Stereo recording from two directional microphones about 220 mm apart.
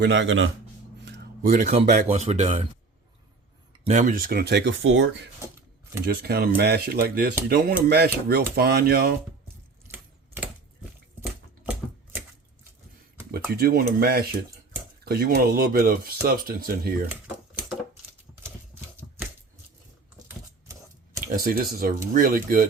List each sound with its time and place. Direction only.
0.0 s speech: 55° right (ahead or behind)
1.0 s speech: 45° right (ahead or behind); by 2.6 s 30° right (ahead or behind)
3.7 s speech: 30° right (ahead or behind); by 5.3 s 60° right (ahead or behind)
6.2 s speech: 45° right (ahead or behind)
9.8 s typewriter: 10° right (ahead or behind)
13.3 s speech: 45° right (ahead or behind)
21.3 s speech: 40° right (ahead or behind)